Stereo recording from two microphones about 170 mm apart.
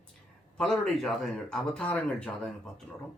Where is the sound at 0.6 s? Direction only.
5° left (ahead or behind).